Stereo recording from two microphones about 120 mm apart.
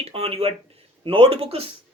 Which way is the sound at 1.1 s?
45° right (ahead or behind).